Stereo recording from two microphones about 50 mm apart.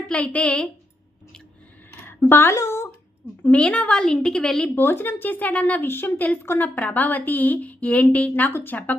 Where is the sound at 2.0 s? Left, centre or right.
Left.